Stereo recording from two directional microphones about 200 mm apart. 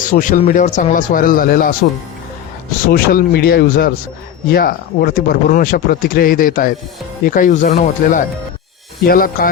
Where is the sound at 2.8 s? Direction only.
45° left (ahead or behind).